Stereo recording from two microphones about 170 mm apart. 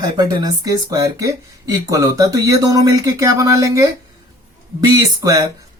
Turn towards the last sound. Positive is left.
turn(degrees=-20)  # may be behind; listen again after turning